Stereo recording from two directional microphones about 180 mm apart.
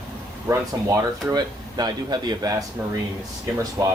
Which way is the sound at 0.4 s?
20° right (ahead or behind).